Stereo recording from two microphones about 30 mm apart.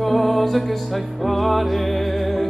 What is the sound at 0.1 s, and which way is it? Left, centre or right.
Music, centre.